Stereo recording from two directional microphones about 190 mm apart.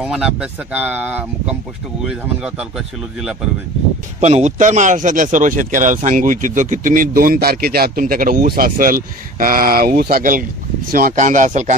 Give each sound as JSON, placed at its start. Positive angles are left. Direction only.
{"t": 0.0, "sound": "speech", "side_deg": -5}
{"t": 4.2, "sound": "speech", "side_deg": -35}